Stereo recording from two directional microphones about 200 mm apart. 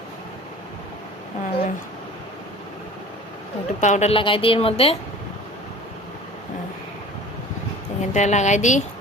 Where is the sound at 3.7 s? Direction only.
35° left (ahead or behind).